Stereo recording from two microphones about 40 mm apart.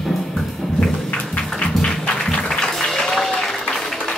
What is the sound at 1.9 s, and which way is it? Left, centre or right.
Music, centre.